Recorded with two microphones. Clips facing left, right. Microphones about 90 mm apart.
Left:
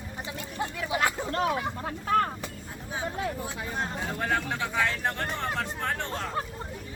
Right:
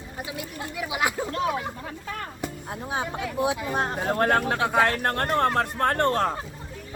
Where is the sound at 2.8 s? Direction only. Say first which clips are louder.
Right 2 dB; 70° right (ahead or behind).